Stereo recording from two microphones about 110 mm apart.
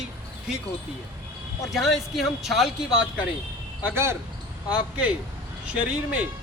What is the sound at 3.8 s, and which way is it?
Speech, 20° right (ahead or behind).